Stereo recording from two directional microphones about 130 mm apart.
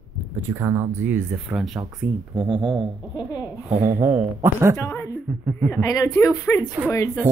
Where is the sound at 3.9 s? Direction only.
20° right (ahead or behind).